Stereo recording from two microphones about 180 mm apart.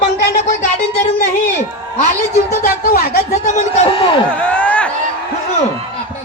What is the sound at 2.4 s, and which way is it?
A man's voice, 55° left (ahead or behind).